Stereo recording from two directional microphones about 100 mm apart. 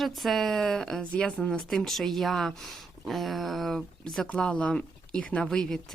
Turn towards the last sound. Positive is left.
turn(degrees=5)  # may be behind; listen again after turning